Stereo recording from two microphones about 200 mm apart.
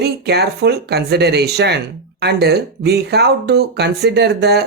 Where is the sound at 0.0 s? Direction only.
55° right (ahead or behind).